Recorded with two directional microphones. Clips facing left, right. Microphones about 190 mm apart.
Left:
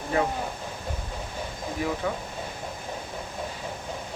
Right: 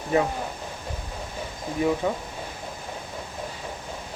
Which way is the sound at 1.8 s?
20° right (ahead or behind).